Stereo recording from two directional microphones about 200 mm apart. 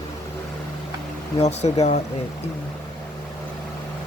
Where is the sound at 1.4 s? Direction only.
35° left (ahead or behind).